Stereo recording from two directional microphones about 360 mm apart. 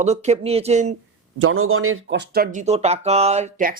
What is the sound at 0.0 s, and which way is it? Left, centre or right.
Speech, centre.